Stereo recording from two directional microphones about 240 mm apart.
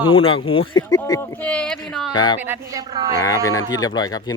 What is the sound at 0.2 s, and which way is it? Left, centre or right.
Speech, left.